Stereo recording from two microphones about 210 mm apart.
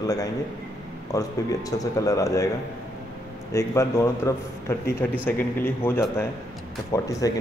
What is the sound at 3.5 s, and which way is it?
A man's voice, 15° left (ahead or behind).